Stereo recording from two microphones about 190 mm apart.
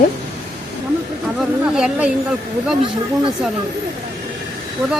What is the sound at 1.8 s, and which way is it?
Speech, 5° right (ahead or behind).